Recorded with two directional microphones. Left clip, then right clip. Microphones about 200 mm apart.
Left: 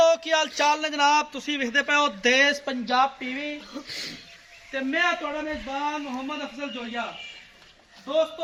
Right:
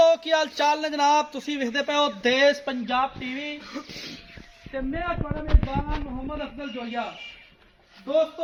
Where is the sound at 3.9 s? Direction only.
Centre (ahead or behind).